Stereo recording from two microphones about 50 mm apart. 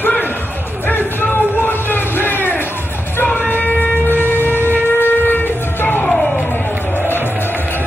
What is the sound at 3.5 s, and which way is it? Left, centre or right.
Shofar, left.